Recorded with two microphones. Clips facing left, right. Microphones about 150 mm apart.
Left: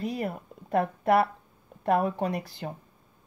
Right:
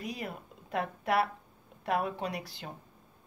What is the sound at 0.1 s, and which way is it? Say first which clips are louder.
A woman's voice: left 7 dB; 50° left (ahead or behind).